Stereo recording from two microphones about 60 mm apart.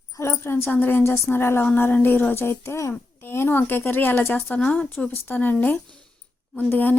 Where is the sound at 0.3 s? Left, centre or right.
Left.